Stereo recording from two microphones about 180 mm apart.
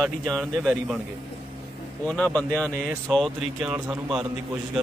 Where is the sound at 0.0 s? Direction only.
Centre (ahead or behind).